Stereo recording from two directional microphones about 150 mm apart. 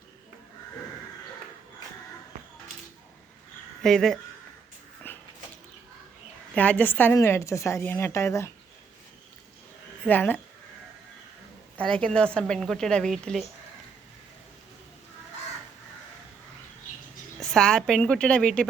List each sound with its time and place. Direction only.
3.8 s a woman's voice: centre (ahead or behind)
5.0 s a sound: 15° left (ahead or behind)
6.5 s a woman's voice: 10° left (ahead or behind)
10.1 s a woman's voice: 10° left (ahead or behind)
11.8 s a woman's voice: 5° left (ahead or behind)
17.4 s a woman's voice: 5° left (ahead or behind)